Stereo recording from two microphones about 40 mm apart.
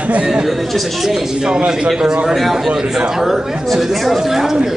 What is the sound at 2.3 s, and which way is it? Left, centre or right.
A man's voice, centre.